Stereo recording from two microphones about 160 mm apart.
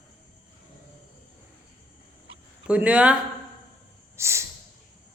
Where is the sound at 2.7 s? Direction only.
10° right (ahead or behind).